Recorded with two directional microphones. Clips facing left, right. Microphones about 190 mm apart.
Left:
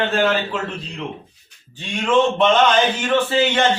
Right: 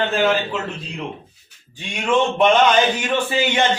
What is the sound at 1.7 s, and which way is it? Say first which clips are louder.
Speech: left 2 dB; 15° right (ahead or behind).